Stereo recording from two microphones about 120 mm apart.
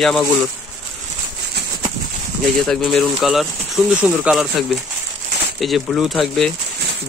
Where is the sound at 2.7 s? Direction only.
5° left (ahead or behind).